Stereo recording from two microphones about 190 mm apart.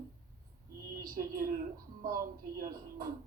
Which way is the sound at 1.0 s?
50° right (ahead or behind).